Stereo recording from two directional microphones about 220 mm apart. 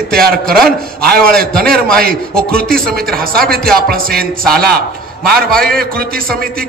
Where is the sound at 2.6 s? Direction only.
40° right (ahead or behind).